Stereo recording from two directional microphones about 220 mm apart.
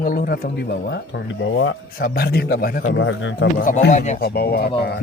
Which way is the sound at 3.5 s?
35° left (ahead or behind).